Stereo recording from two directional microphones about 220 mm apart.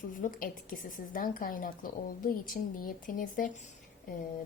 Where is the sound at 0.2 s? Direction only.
40° left (ahead or behind).